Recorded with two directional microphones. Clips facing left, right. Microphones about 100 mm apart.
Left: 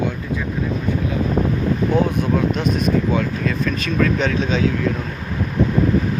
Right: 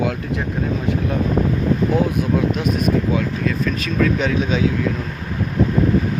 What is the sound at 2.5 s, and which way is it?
Speech, 5° right (ahead or behind).